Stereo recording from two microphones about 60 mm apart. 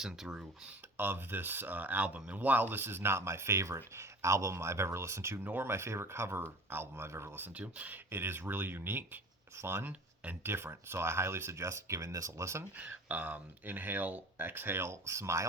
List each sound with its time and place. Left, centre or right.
0.0 s speech: centre
0.9 s speech: right
5.4 s speech: right
7.5 s speech: right
8.1 s speech: right
12.7 s speech: right